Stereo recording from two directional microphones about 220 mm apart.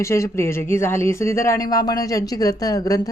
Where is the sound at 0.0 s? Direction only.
15° left (ahead or behind).